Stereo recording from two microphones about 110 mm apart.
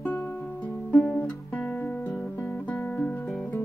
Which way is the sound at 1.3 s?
10° left (ahead or behind).